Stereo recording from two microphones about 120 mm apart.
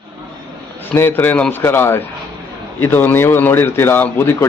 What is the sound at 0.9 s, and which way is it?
Speech, 20° left (ahead or behind).